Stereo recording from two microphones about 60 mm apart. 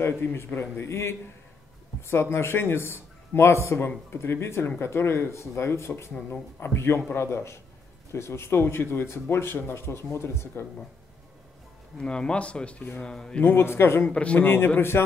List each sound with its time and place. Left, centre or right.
0.0 s a man's voice: left
12.0 s speech: centre
13.4 s speech: left
14.0 s speech: centre
14.4 s a man's voice: left